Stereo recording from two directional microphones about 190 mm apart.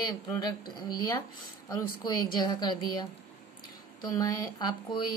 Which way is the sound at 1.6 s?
20° left (ahead or behind).